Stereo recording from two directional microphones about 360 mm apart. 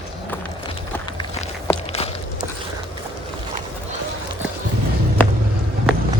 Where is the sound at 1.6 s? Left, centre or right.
Centre.